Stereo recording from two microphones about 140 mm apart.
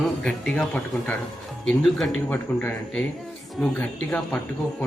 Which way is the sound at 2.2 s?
15° left (ahead or behind).